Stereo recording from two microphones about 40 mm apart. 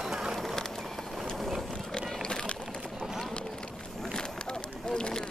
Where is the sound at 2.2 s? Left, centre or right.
Left.